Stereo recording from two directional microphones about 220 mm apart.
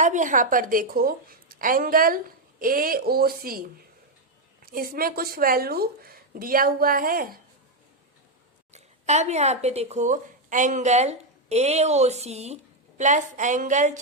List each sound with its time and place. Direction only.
0.0 s a woman's voice: 35° right (ahead or behind)
4.6 s a woman's voice: 40° right (ahead or behind)
8.7 s a woman's voice: 30° right (ahead or behind)